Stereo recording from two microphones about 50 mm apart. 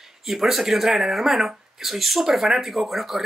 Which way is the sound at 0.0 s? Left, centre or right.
Centre.